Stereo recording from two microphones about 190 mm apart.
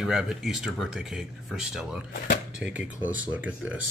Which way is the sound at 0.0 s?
5° right (ahead or behind).